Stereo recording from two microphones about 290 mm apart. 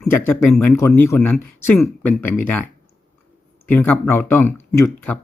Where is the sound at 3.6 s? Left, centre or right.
Centre.